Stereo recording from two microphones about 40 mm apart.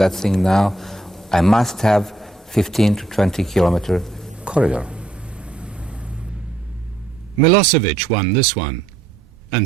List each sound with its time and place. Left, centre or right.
0.0 s a man's voice: centre
4.4 s a sound: right
7.4 s speech: centre